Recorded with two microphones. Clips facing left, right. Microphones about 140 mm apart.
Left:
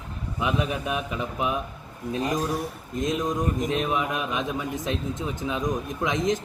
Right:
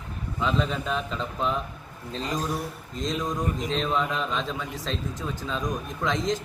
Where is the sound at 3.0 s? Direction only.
20° left (ahead or behind).